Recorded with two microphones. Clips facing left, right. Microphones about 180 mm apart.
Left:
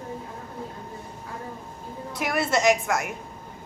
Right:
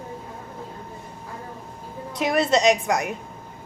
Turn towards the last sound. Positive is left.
turn(degrees=-20)  # may be behind; listen again after turning